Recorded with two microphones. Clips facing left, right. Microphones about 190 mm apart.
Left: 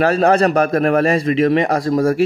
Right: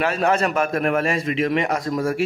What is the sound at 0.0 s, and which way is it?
A man's voice, 40° left (ahead or behind).